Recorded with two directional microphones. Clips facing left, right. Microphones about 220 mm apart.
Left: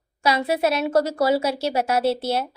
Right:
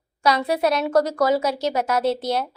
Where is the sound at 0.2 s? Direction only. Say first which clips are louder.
Right 1 dB; 10° left (ahead or behind).